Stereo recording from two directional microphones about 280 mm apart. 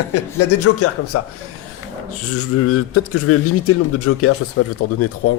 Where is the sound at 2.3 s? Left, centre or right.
Left.